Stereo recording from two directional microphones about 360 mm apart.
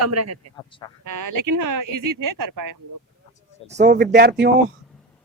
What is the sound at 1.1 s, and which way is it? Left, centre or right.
Speech, right.